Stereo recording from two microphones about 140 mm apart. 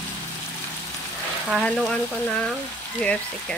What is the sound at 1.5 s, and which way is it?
Speech, 5° left (ahead or behind).